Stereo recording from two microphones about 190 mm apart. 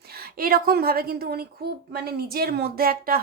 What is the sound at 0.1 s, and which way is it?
A woman's voice, 50° right (ahead or behind).